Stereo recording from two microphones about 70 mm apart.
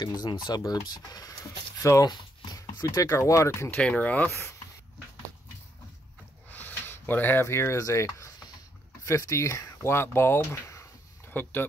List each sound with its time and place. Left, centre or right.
0.0 s speech: left
0.7 s speech: left
1.8 s speech: left
2.0 s a sound: left
3.0 s speech: left
3.7 s speech: centre
4.3 s speech: left
6.5 s a sound: left
7.8 s speech: left
11.2 s speech: left